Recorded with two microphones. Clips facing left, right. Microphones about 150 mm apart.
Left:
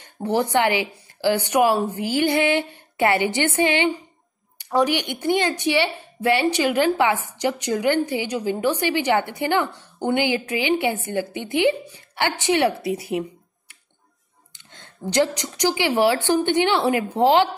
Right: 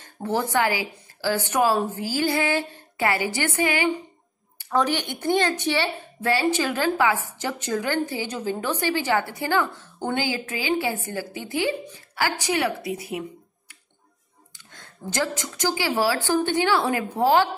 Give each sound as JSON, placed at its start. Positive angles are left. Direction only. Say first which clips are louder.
{"t": 0.0, "sound": "a woman's voice", "louder": "left 4 dB", "side_deg": 20}
{"t": 4.6, "sound": "a woman's voice", "louder": "left 3 dB", "side_deg": 15}
{"t": 14.7, "sound": "a woman's voice", "louder": "left 5 dB", "side_deg": 20}